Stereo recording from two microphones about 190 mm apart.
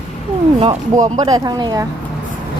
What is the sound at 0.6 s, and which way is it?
Speech, 35° right (ahead or behind).